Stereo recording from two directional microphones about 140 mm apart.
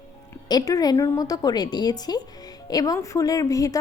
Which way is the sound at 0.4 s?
25° left (ahead or behind).